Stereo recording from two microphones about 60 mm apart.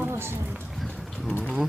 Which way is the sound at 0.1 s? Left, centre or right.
Right.